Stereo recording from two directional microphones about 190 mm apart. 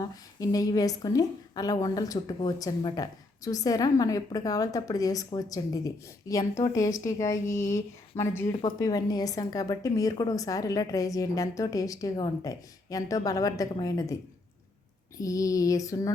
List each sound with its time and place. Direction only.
0.0 s a woman's voice: 20° left (ahead or behind)
15.2 s a woman's voice: 20° left (ahead or behind)